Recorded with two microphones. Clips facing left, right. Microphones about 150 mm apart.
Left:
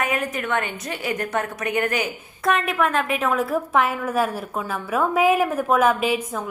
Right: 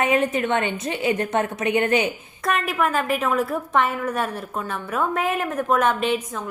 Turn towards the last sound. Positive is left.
turn(degrees=5)  # may be behind; listen again after turning